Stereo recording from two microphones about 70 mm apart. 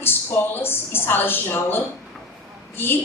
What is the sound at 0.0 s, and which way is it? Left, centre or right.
A woman's voice, left.